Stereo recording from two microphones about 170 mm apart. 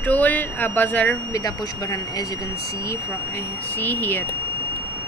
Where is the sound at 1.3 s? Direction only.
20° left (ahead or behind).